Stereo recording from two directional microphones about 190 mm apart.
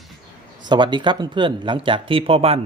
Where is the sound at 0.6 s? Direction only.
25° right (ahead or behind).